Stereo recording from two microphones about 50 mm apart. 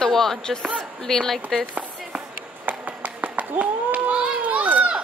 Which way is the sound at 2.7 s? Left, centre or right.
Right.